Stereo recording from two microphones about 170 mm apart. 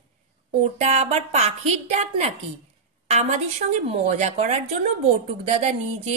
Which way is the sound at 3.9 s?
40° right (ahead or behind).